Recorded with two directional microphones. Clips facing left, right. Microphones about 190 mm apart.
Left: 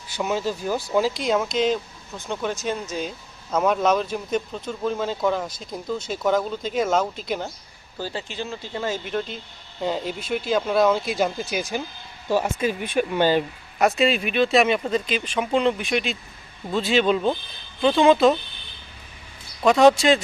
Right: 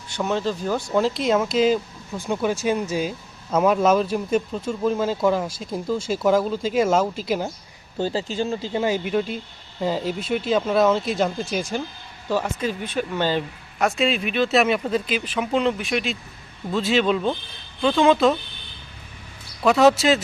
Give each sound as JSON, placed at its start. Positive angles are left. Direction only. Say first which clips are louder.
{"t": 0.1, "sound": "speech", "louder": "right 1 dB", "side_deg": 5}
{"t": 8.1, "sound": "speech", "louder": "right 6 dB", "side_deg": -35}
{"t": 8.7, "sound": "speech", "louder": "right 3 dB", "side_deg": -15}
{"t": 19.6, "sound": "speech", "louder": "left 1 dB", "side_deg": -5}